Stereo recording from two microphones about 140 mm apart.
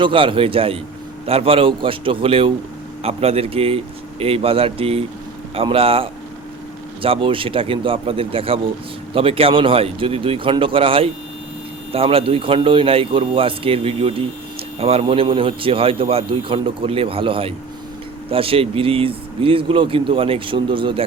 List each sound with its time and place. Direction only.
0.0 s speech: 40° right (ahead or behind)